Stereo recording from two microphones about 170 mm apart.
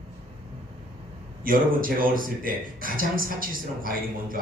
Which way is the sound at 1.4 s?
55° right (ahead or behind).